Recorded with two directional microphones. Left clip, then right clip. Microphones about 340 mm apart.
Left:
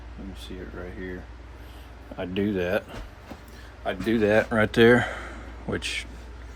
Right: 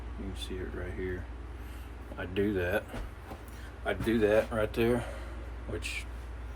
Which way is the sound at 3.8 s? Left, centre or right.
Left.